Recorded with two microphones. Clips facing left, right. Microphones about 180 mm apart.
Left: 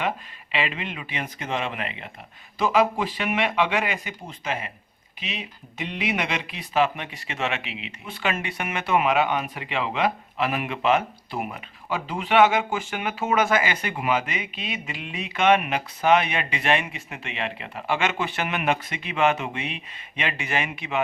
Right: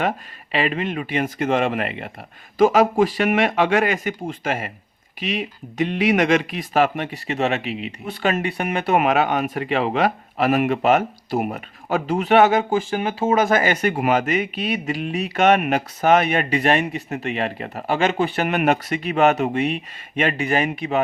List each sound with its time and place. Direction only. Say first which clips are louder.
0.5 s speech: right 7 dB; 45° right (ahead or behind)